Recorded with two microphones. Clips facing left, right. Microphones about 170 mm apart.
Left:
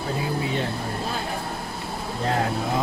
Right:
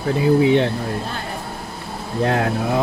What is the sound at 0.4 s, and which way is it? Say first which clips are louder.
Speech: right 11 dB; 75° right (ahead or behind).